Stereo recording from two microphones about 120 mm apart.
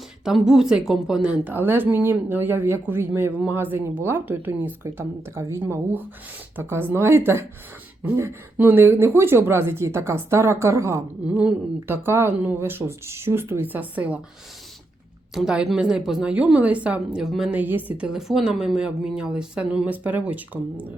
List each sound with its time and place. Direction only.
0.3 s a woman's voice: 5° right (ahead or behind)
15.4 s a woman's voice: 5° right (ahead or behind)
17.5 s a woman's voice: 15° right (ahead or behind)